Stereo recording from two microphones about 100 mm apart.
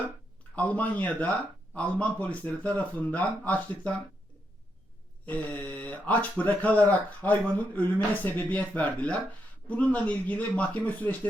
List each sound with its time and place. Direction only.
0.5 s speech: 15° left (ahead or behind)
5.2 s speech: 15° left (ahead or behind)